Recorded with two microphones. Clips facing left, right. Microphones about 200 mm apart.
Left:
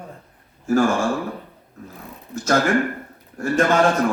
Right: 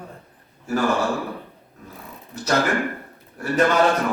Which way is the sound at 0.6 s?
45° left (ahead or behind).